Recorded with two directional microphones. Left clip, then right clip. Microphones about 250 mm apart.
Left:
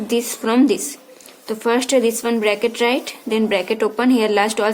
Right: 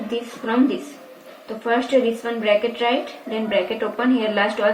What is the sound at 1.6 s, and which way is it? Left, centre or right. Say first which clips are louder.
A woman's voice: left 2 dB; left.